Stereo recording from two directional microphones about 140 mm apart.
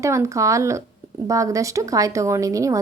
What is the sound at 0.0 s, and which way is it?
Speech, 20° right (ahead or behind).